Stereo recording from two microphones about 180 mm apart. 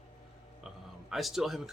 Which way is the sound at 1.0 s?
Centre (ahead or behind).